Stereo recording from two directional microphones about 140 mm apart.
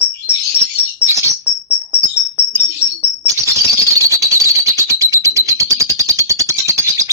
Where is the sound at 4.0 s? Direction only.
20° right (ahead or behind).